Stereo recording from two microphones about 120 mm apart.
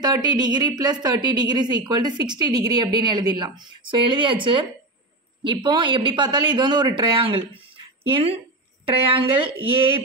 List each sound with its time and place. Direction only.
0.0 s speech: 35° right (ahead or behind)